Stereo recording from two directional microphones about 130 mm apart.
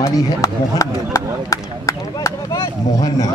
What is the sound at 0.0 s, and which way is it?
Speech, 25° left (ahead or behind).